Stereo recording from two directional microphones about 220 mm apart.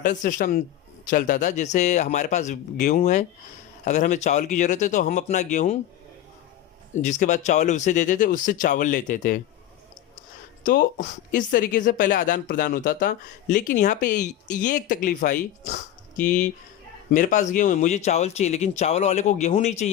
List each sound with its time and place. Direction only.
0.0 s a woman's voice: 35° left (ahead or behind)
6.9 s a woman's voice: 35° left (ahead or behind)
10.7 s a woman's voice: 40° left (ahead or behind)